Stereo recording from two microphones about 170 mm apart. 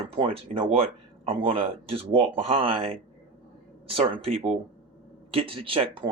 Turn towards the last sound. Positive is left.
turn(degrees=-30)  # may be behind; listen again after turning